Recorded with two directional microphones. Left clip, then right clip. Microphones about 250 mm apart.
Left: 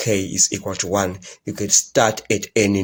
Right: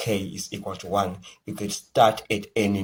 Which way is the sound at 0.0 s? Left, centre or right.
Left.